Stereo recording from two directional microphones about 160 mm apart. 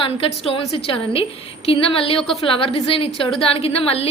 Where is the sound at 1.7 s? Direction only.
35° left (ahead or behind).